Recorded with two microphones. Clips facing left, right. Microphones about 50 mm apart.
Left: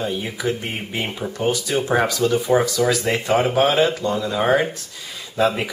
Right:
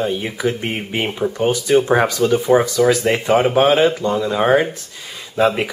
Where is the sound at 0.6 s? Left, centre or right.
Right.